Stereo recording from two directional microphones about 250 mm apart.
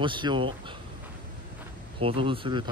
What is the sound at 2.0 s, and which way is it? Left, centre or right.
Speech, right.